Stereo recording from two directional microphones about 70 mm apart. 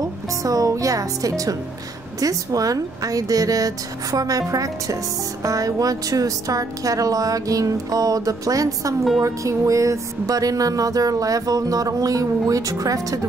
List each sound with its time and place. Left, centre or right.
0.4 s music: right